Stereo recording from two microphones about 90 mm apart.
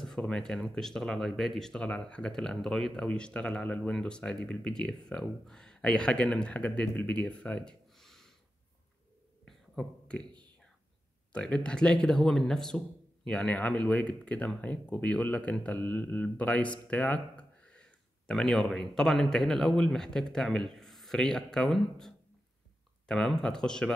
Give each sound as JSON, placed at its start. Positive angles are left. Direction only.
{"t": 0.0, "sound": "speech", "side_deg": 5}
{"t": 9.4, "sound": "a sound", "side_deg": 10}
{"t": 11.3, "sound": "speech", "side_deg": 10}